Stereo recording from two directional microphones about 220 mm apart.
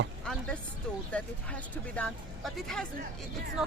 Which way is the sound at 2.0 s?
Centre (ahead or behind).